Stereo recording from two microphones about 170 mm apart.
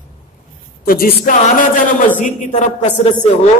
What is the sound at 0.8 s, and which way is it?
Music, 60° left (ahead or behind).